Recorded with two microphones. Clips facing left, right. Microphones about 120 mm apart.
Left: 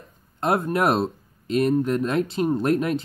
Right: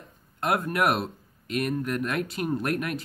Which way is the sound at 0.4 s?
30° left (ahead or behind).